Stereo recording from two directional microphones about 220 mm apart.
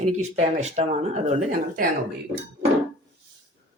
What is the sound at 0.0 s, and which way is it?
Speech, 30° right (ahead or behind).